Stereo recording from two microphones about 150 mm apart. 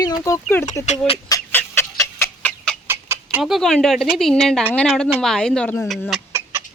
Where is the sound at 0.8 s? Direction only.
45° left (ahead or behind).